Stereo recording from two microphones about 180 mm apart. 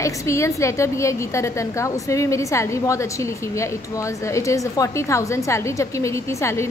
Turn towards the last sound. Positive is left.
turn(degrees=15)  # may be behind; listen again after turning